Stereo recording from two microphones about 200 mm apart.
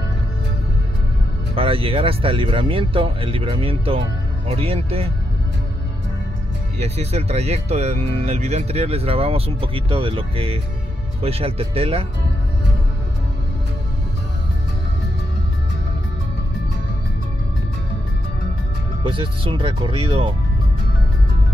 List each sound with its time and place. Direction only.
1.5 s speech: 25° right (ahead or behind)
6.8 s speech: 30° right (ahead or behind)
19.0 s speech: 25° right (ahead or behind)